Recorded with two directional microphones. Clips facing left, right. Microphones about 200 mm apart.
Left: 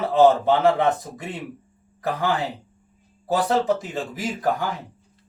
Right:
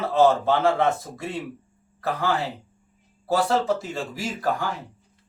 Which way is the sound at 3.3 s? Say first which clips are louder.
Left 1 dB; 20° left (ahead or behind).